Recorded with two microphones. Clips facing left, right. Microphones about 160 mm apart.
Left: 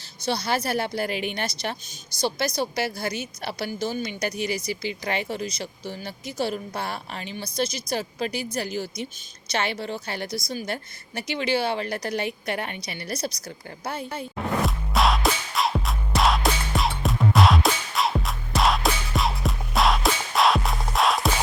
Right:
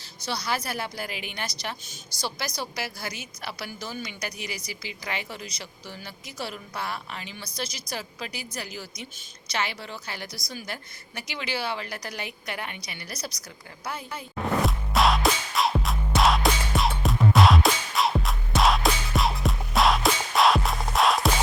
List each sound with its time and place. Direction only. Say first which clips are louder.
0.2 s a woman's voice: left 5 dB; 25° left (ahead or behind)
14.6 s music: even; centre (ahead or behind)